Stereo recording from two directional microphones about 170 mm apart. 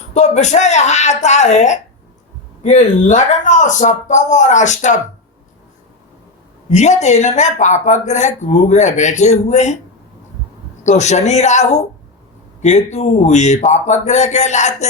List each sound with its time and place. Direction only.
0.1 s speech: 45° left (ahead or behind)
6.7 s speech: 45° left (ahead or behind)
10.8 s speech: 45° left (ahead or behind)